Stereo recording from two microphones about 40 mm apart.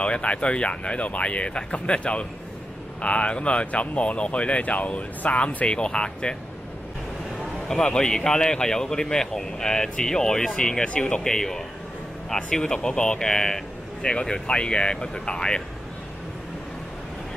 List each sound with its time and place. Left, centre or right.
0.0 s speech: left
5.7 s speech: left
7.6 s speech: centre
11.2 s speech: centre